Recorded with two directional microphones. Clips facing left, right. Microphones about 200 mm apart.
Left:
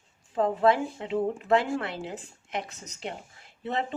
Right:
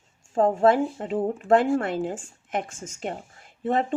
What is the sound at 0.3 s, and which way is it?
A woman's voice, 45° right (ahead or behind).